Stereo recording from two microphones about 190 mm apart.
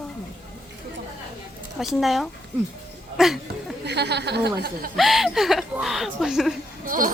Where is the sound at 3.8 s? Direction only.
60° right (ahead or behind).